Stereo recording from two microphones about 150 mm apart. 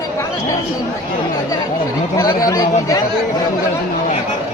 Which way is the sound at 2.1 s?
20° left (ahead or behind).